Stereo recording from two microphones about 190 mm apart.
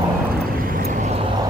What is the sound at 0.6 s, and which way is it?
Vehicle, 45° right (ahead or behind).